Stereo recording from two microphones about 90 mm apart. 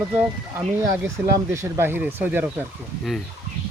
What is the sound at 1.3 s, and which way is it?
Speech, 35° right (ahead or behind).